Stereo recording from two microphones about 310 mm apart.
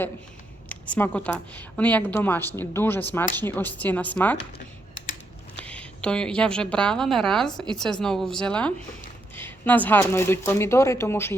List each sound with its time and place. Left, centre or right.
0.7 s a woman's voice: centre
4.5 s typing: left
5.5 s a woman's voice: centre